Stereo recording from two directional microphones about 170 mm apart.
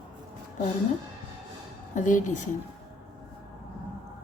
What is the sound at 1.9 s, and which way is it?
Speech, 50° left (ahead or behind).